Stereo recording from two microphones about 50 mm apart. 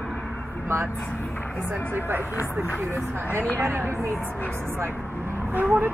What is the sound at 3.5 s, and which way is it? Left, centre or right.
Speech, right.